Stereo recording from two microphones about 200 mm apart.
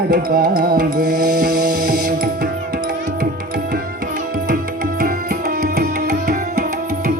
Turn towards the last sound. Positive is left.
turn(degrees=-45)  # may be behind; listen again after turning